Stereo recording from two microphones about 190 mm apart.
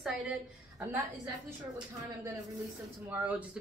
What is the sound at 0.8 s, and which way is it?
A woman's voice, 15° right (ahead or behind).